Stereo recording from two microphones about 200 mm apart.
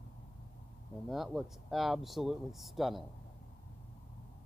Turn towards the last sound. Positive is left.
turn(degrees=0)  # may be behind; listen again after turning